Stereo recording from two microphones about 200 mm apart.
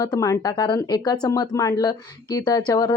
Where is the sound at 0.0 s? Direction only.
15° left (ahead or behind).